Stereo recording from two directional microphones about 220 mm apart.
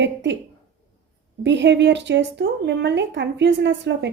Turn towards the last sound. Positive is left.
turn(degrees=-50)  # may be behind; listen again after turning